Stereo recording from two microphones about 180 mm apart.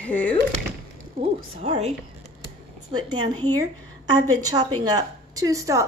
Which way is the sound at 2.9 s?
25° right (ahead or behind).